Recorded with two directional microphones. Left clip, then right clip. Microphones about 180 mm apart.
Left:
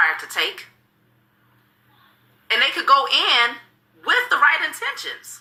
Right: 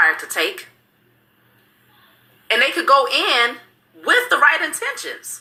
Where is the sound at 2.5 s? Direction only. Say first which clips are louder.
Right 2 dB; 15° left (ahead or behind).